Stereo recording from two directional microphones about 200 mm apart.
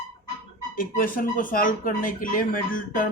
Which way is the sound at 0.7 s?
40° left (ahead or behind).